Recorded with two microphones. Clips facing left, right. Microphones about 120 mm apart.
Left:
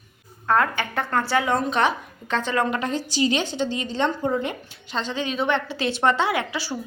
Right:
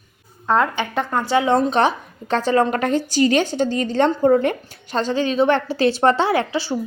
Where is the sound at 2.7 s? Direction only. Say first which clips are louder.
Right 6 dB; 55° right (ahead or behind); by 6.8 s 30° right (ahead or behind).